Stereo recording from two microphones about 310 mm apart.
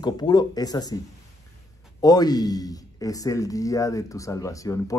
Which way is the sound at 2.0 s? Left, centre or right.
Centre.